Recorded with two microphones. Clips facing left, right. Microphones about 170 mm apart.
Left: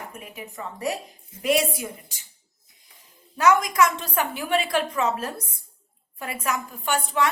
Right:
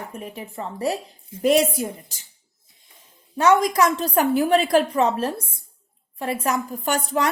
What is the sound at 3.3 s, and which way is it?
A woman's voice, 30° right (ahead or behind).